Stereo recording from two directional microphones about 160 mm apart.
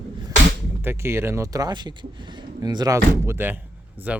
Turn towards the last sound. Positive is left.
turn(degrees=-10)  # may be behind; listen again after turning